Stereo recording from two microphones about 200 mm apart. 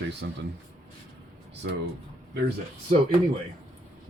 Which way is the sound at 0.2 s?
65° right (ahead or behind).